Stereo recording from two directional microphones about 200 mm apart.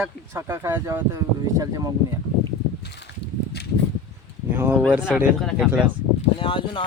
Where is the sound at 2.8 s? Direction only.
60° left (ahead or behind).